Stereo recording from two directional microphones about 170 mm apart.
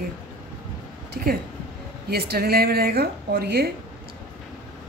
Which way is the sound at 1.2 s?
60° right (ahead or behind).